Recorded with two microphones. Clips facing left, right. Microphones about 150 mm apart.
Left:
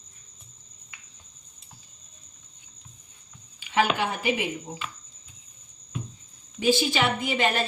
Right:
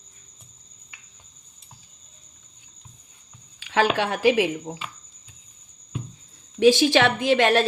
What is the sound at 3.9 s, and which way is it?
Speech, 90° right.